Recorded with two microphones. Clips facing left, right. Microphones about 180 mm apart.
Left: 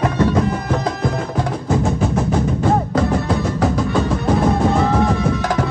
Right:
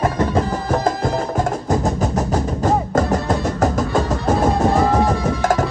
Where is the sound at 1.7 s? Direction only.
40° right (ahead or behind).